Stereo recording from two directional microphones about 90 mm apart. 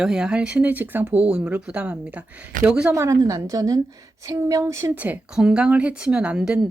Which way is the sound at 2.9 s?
35° right (ahead or behind).